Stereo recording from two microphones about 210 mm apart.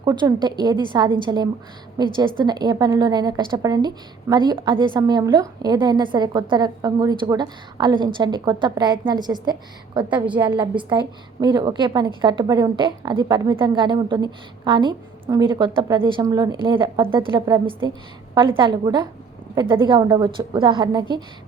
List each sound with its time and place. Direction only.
0.0 s a woman's voice: 20° right (ahead or behind)